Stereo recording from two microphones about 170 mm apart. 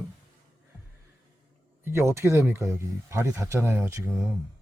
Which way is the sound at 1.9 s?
15° right (ahead or behind).